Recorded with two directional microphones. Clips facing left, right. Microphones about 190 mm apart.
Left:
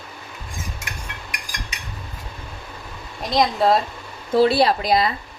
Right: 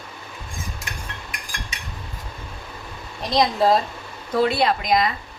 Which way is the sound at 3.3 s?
Centre (ahead or behind).